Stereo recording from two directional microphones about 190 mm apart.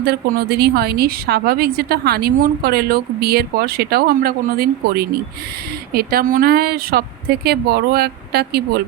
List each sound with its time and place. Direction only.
0.0 s a woman's voice: 55° right (ahead or behind)